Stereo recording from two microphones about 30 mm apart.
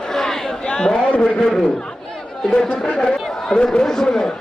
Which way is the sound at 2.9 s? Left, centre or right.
Left.